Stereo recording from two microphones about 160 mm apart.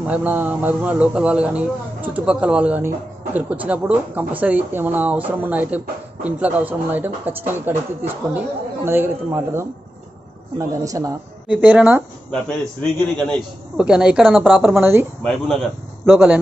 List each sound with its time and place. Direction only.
0.0 s speech: 10° right (ahead or behind)
11.4 s speech: 10° right (ahead or behind)
13.2 s speech: centre (ahead or behind)
14.6 s speech: 15° right (ahead or behind)
15.2 s speech: centre (ahead or behind)
16.1 s speech: 10° right (ahead or behind)